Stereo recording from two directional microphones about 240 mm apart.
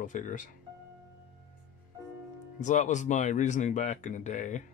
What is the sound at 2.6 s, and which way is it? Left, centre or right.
Speech, left.